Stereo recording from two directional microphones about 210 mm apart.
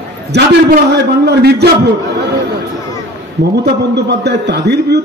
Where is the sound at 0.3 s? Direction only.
50° right (ahead or behind).